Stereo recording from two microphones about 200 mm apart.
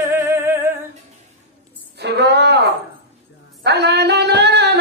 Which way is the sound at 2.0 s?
55° right (ahead or behind).